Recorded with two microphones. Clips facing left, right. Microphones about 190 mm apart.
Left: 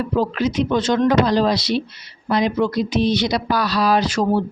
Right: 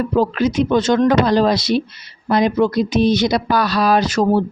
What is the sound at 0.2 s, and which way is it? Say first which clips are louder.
Speech: right 3 dB; 50° right (ahead or behind).